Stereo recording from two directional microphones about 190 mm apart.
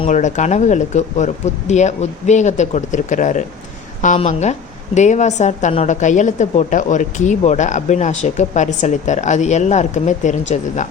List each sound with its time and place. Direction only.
0.0 s a woman's voice: 40° left (ahead or behind)